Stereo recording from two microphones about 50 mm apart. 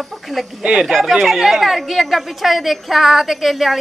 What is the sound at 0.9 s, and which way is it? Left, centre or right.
A woman's voice, centre.